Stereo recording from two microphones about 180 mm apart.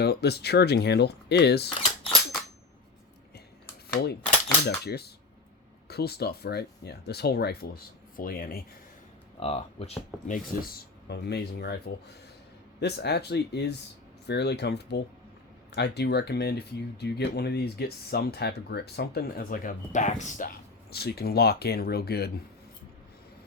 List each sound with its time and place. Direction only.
0.0 s speech: 65° left (ahead or behind)
3.9 s speech: 65° left (ahead or behind)
9.4 s speech: 35° left (ahead or behind); by 11.8 s 65° left (ahead or behind)
12.8 s speech: 65° left (ahead or behind); by 20.5 s 40° left (ahead or behind)
20.9 s speech: 60° left (ahead or behind)